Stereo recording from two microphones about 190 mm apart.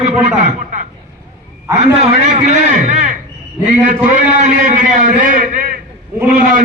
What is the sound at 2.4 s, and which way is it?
A man's voice, 40° right (ahead or behind).